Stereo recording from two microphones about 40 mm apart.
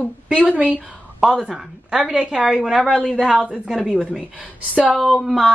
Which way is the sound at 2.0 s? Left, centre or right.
Right.